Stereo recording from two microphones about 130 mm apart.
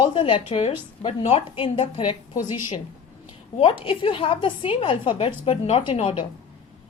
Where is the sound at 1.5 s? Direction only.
40° left (ahead or behind).